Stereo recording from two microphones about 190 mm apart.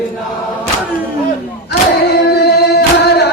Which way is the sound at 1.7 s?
55° left (ahead or behind).